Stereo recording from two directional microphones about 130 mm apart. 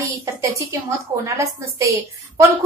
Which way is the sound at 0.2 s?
25° right (ahead or behind).